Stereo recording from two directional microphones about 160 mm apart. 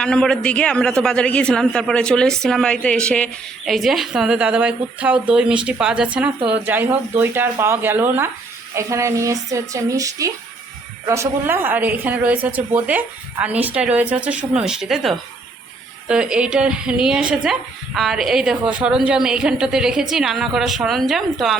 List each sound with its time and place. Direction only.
0.0 s a woman's voice: 5° left (ahead or behind)